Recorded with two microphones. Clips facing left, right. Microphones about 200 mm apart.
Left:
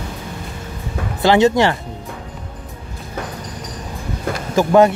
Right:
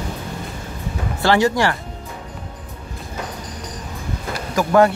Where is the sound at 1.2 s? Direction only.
20° left (ahead or behind).